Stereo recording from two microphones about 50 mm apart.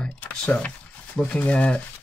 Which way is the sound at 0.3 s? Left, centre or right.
Left.